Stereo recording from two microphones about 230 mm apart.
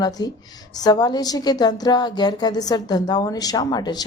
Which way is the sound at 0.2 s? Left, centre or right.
Centre.